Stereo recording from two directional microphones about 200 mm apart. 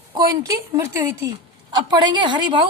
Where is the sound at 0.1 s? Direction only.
20° right (ahead or behind).